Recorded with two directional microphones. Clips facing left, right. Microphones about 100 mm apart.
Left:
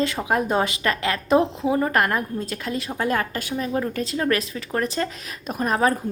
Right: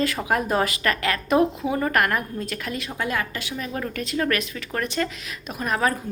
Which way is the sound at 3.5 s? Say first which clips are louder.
Left 5 dB; 30° left (ahead or behind).